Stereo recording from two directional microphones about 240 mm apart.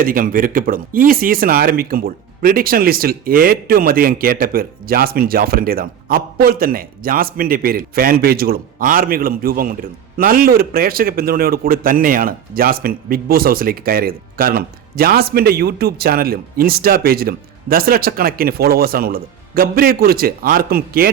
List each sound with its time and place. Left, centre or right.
0.0 s a man's voice: right